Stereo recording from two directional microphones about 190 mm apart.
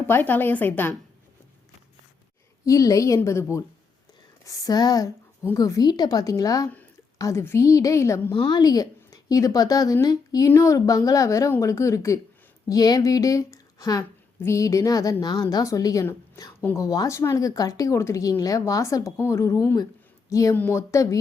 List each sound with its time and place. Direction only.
0.1 s a woman's voice: 10° left (ahead or behind)
2.6 s a woman's voice: 15° left (ahead or behind)